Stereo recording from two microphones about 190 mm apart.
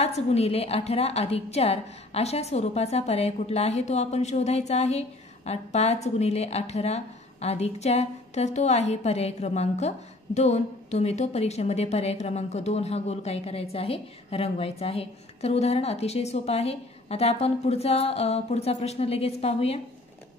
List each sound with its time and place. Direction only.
0.0 s a woman's voice: 35° left (ahead or behind)